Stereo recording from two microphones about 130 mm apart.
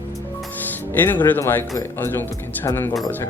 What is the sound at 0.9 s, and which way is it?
Speech, 15° left (ahead or behind).